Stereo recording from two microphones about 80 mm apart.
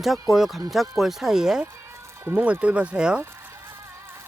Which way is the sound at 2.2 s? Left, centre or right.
Right.